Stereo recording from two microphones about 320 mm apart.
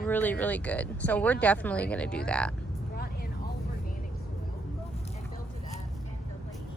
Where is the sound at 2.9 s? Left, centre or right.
Left.